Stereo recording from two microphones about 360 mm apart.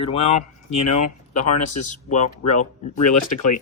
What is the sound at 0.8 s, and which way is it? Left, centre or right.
Speech, left.